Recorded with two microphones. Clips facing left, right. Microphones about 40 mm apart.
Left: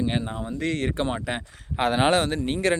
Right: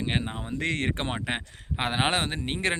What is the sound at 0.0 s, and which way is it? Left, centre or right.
Speech, right.